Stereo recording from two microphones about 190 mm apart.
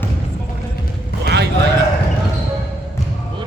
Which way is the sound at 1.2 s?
60° right (ahead or behind).